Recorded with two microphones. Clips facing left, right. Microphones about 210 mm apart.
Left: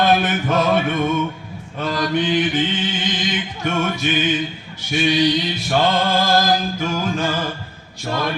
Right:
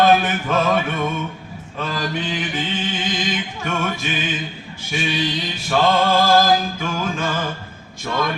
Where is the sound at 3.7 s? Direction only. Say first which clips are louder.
Left 4 dB; 40° left (ahead or behind).